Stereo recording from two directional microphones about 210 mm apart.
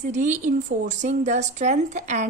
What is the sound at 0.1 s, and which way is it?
A woman's voice, 35° right (ahead or behind).